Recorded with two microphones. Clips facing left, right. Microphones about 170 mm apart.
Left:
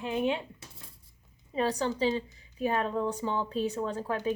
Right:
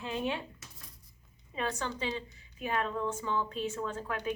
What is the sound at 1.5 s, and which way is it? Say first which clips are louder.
Speech: left 7 dB; 35° left (ahead or behind).